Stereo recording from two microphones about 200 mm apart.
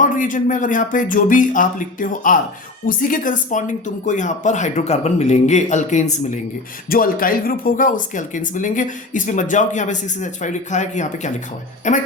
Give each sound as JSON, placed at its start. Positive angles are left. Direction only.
{"t": 0.0, "sound": "speech", "side_deg": 40}